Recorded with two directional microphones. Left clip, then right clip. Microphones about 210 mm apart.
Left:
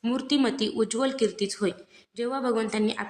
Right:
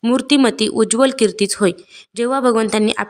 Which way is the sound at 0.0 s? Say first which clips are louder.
Right 11 dB; 40° right (ahead or behind).